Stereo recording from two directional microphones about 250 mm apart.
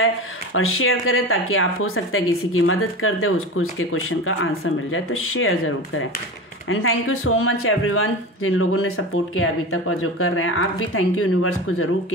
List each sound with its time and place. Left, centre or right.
0.6 s speech: left